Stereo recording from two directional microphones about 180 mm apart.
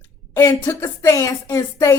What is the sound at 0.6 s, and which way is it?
A woman's voice, 15° left (ahead or behind).